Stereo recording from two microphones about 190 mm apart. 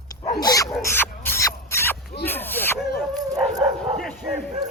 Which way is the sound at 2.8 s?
55° left (ahead or behind).